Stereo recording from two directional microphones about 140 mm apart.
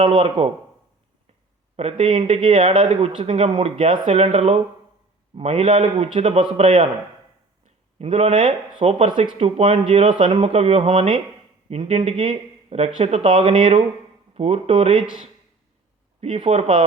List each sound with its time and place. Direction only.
0.0 s speech: 35° right (ahead or behind)
1.7 s speech: 50° right (ahead or behind)
7.9 s speech: 50° right (ahead or behind)
16.2 s speech: 45° right (ahead or behind)